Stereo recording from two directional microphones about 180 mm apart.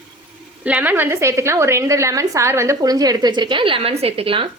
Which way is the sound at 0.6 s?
10° right (ahead or behind).